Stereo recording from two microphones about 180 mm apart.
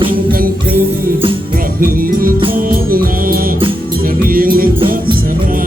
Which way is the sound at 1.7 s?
50° right (ahead or behind).